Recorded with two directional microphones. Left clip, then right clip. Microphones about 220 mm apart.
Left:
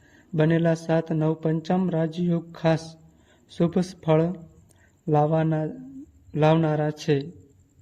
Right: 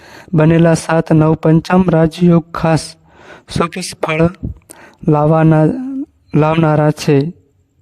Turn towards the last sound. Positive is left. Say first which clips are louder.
# right 12 dB
turn(degrees=-45)  # may be behind; listen again after turning